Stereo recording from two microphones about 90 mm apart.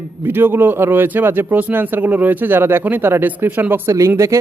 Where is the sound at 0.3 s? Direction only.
25° right (ahead or behind).